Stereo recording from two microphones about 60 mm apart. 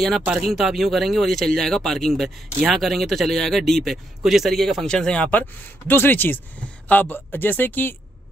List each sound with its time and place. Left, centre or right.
0.4 s speech: centre
4.8 s speech: centre
5.9 s speech: left